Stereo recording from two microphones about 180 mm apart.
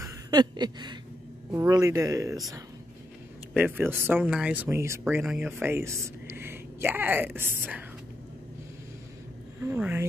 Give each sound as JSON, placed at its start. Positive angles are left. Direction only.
{"t": 0.0, "sound": "a sound", "side_deg": -25}
{"t": 1.5, "sound": "speech", "side_deg": -15}
{"t": 3.5, "sound": "speech", "side_deg": -10}
{"t": 9.6, "sound": "speech", "side_deg": -10}